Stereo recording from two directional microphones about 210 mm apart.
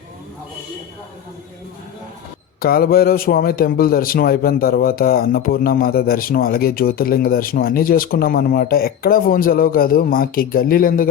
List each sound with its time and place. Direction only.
2.6 s a man's voice: 45° left (ahead or behind)